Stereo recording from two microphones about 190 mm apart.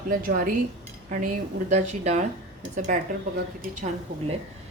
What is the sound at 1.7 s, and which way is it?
Speech, 35° right (ahead or behind).